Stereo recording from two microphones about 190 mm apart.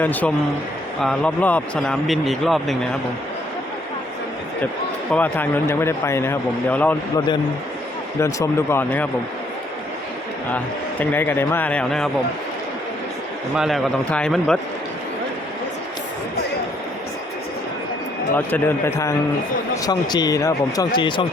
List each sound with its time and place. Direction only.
0.0 s a man's voice: 10° left (ahead or behind)
5.1 s a man's voice: 10° left (ahead or behind)
8.2 s a man's voice: 15° left (ahead or behind)
11.0 s a man's voice: 10° left (ahead or behind)
13.6 s speech: centre (ahead or behind)
18.3 s a man's voice: 10° left (ahead or behind); by 21.2 s 25° left (ahead or behind)